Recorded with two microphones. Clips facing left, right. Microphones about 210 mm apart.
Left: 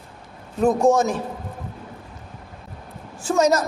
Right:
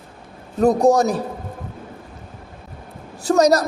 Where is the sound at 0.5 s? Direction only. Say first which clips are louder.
Right 2 dB; 35° right (ahead or behind).